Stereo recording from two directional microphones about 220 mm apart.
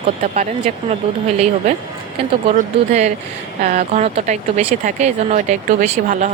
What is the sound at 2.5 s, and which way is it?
Speech, 30° right (ahead or behind).